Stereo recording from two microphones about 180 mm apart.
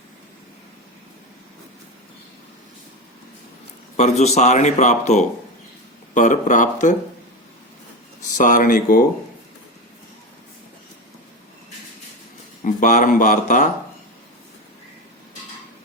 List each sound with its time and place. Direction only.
3.9 s speech: 40° left (ahead or behind)
8.4 s speech: 45° left (ahead or behind)
12.6 s speech: 45° left (ahead or behind)